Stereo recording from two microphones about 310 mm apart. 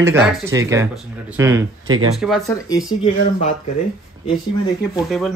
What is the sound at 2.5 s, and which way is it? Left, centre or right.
Speech, centre.